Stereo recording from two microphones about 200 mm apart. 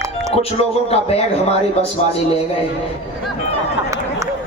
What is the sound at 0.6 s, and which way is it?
A man's voice, 30° left (ahead or behind).